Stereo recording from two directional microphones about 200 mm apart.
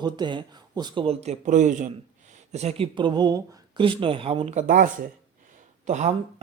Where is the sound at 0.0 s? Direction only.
20° right (ahead or behind).